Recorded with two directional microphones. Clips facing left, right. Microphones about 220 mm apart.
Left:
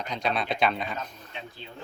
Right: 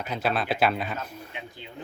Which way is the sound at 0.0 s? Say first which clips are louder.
Right 2 dB; 5° right (ahead or behind).